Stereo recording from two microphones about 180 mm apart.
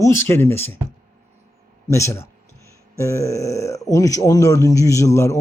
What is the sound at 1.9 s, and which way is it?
Speech, 15° left (ahead or behind).